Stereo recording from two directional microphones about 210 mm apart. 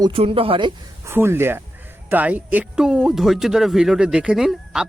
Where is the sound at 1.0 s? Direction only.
10° right (ahead or behind).